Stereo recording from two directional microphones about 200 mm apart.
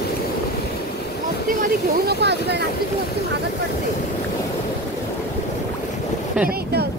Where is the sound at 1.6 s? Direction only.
55° right (ahead or behind).